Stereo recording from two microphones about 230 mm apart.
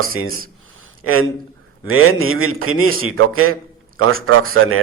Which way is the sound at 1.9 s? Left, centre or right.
Right.